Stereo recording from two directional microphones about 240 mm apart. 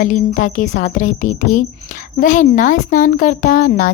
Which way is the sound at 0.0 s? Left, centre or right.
Left.